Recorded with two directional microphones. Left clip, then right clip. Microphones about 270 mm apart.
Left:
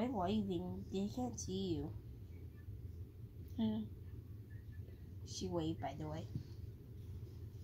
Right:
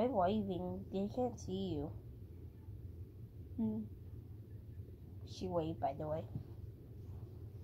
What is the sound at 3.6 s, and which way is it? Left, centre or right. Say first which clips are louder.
Speech: even; left.